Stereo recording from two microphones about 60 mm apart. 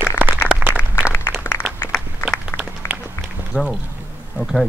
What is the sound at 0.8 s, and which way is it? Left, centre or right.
Applause, left.